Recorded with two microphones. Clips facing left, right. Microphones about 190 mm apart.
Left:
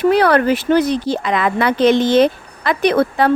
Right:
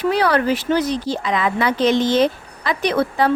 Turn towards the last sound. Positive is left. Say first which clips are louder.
# left 4 dB
turn(degrees=60)  # may be behind; listen again after turning